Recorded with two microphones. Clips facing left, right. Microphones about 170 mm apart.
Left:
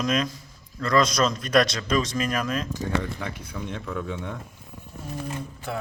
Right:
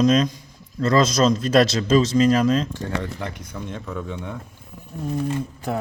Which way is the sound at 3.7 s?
5° right (ahead or behind).